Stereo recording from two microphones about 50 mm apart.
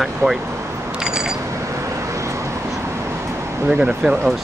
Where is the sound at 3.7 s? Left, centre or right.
Centre.